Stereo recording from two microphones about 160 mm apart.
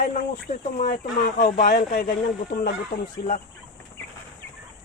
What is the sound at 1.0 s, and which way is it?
Speech, 70° left (ahead or behind).